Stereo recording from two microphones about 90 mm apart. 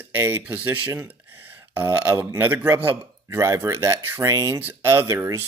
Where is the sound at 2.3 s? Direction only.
25° right (ahead or behind).